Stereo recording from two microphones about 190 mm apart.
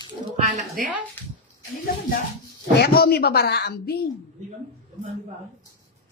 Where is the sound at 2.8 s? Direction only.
55° left (ahead or behind).